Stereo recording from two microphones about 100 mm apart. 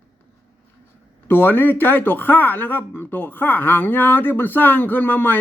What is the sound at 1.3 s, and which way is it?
Speech, 20° left (ahead or behind).